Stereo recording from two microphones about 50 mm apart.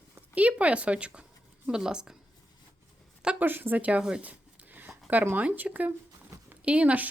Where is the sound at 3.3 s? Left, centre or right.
Right.